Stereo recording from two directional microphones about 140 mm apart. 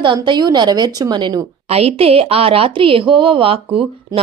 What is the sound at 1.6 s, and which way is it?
Speech, 45° right (ahead or behind).